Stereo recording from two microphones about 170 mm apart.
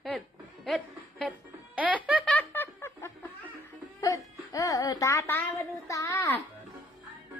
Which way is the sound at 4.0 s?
20° left (ahead or behind).